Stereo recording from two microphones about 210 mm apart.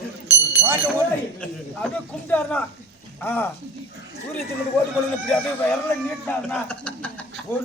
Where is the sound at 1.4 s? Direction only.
5° left (ahead or behind).